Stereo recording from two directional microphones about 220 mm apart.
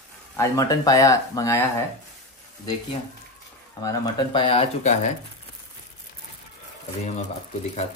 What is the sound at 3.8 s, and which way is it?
Speech, 20° left (ahead or behind).